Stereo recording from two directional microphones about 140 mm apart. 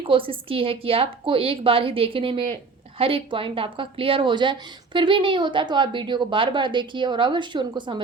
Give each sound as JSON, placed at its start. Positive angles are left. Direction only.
{"t": 0.1, "sound": "speech", "side_deg": -40}